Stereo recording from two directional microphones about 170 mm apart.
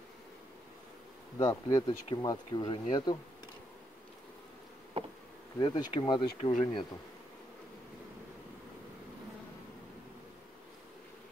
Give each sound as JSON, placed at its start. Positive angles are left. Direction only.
{"t": 1.4, "sound": "speech", "side_deg": 20}
{"t": 5.6, "sound": "speech", "side_deg": 25}